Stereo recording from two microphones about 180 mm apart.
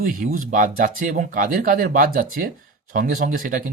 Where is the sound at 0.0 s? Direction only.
50° right (ahead or behind).